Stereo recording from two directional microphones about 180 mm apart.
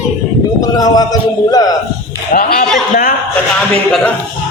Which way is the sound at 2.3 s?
55° left (ahead or behind).